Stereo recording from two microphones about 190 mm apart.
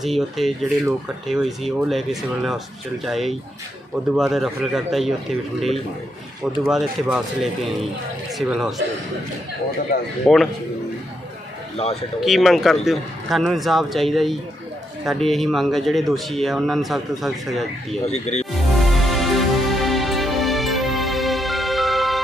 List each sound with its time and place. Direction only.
0.0 s speech: centre (ahead or behind)
8.4 s speech: centre (ahead or behind)
10.2 s speech: centre (ahead or behind)
11.7 s speech: 30° left (ahead or behind)
12.2 s speech: centre (ahead or behind)
18.0 s speech: 35° left (ahead or behind)
18.5 s music: centre (ahead or behind)